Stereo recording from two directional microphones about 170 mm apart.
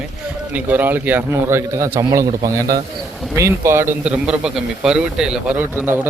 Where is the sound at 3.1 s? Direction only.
Centre (ahead or behind).